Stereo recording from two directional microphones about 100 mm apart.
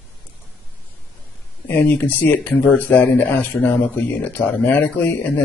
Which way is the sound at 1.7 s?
20° left (ahead or behind).